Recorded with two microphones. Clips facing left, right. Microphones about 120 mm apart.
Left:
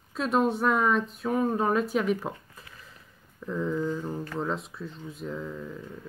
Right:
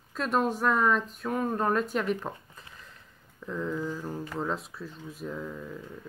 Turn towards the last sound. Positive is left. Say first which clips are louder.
# left 1 dB
turn(degrees=0)  # may be behind; listen again after turning